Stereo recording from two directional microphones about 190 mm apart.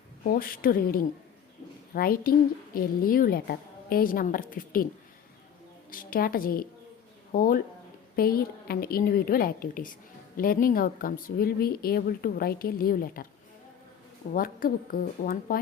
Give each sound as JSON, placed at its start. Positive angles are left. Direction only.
{"t": 0.3, "sound": "a woman's voice", "side_deg": 50}
{"t": 5.9, "sound": "speech", "side_deg": 50}
{"t": 14.3, "sound": "speech", "side_deg": 50}